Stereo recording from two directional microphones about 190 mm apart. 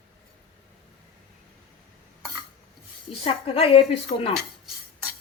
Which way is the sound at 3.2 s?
30° left (ahead or behind).